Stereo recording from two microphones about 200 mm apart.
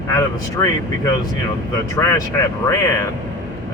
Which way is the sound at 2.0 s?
15° left (ahead or behind).